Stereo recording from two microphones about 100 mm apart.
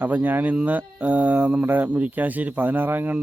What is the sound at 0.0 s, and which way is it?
Speech, 20° right (ahead or behind).